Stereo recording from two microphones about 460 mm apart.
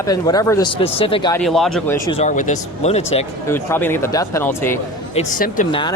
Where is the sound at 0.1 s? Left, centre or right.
Centre.